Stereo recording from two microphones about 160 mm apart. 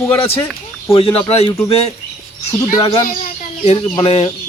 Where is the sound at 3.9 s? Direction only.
40° left (ahead or behind).